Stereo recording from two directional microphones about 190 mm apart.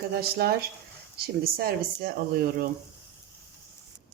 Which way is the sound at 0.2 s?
55° right (ahead or behind).